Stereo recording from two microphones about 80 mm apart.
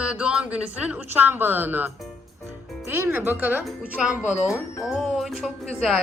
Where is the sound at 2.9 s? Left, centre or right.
Right.